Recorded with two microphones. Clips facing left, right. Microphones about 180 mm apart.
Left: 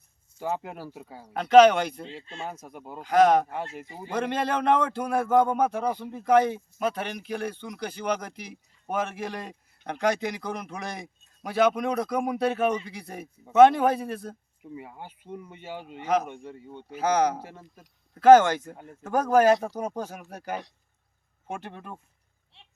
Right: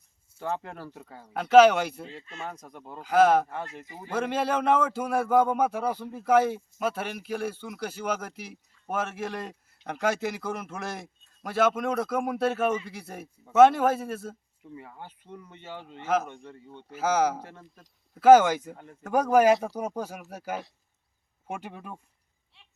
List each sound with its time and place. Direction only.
0.3 s speech: 10° left (ahead or behind)
1.3 s speech: 5° right (ahead or behind)
2.2 s speech: 30° left (ahead or behind)
2.5 s speech: 5° left (ahead or behind)
3.0 s speech: 5° right (ahead or behind)
3.8 s speech: 25° left (ahead or behind)
4.1 s speech: 5° right (ahead or behind)
14.6 s speech: 15° left (ahead or behind)
16.9 s speech: 5° right (ahead or behind)
17.4 s speech: 10° left (ahead or behind)
18.1 s speech: 10° right (ahead or behind)
18.8 s speech: 10° left (ahead or behind)
19.1 s speech: 10° right (ahead or behind)